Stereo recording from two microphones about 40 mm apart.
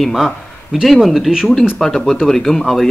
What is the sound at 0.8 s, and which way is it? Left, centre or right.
Speech, centre.